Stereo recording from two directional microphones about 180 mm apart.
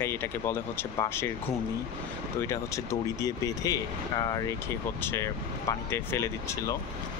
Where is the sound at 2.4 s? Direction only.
15° left (ahead or behind).